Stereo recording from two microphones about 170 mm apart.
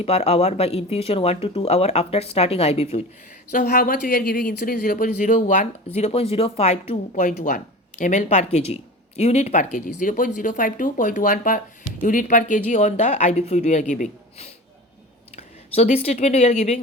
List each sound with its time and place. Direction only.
0.0 s speech: 35° left (ahead or behind)
3.5 s speech: 55° left (ahead or behind)
7.3 s speech: 60° left (ahead or behind); by 16.8 s 40° left (ahead or behind)